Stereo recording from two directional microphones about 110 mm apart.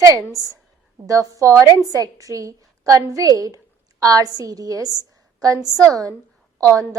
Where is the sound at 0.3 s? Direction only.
30° right (ahead or behind).